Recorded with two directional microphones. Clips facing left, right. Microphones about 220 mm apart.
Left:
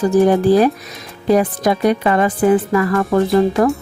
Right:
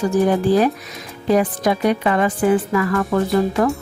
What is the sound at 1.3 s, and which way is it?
Speech, 40° left (ahead or behind).